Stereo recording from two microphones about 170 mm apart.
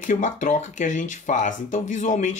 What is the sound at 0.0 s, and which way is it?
Speech, 50° left (ahead or behind).